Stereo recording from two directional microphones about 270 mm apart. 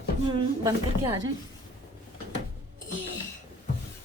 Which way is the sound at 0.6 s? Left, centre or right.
Centre.